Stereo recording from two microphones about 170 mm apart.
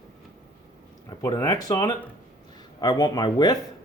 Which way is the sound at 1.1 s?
20° left (ahead or behind).